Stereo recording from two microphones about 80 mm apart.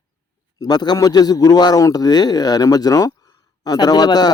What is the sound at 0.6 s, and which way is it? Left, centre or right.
A man's voice, left.